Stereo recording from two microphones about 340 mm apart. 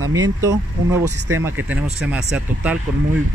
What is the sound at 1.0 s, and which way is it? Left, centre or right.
Speech, right.